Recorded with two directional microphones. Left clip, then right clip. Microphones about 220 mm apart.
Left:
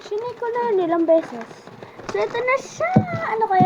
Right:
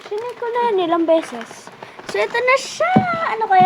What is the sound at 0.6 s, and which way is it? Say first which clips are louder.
Speech: right 3 dB; centre (ahead or behind).